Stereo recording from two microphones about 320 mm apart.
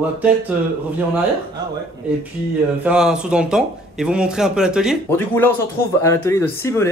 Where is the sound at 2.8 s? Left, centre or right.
Centre.